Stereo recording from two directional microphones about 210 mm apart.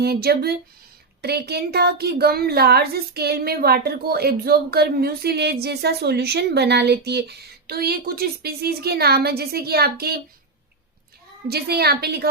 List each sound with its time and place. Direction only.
0.0 s speech: 50° right (ahead or behind)
11.4 s speech: 50° right (ahead or behind)